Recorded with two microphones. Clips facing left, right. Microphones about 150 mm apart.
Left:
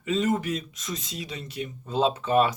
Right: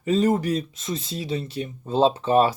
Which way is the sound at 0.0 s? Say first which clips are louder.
Right 5 dB; 35° right (ahead or behind).